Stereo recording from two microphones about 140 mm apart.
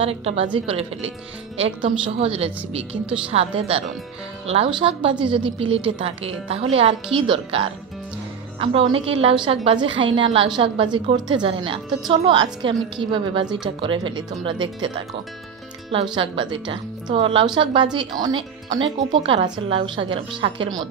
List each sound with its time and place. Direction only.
0.0 s a woman's voice: 45° right (ahead or behind)
15.9 s a woman's voice: 40° right (ahead or behind)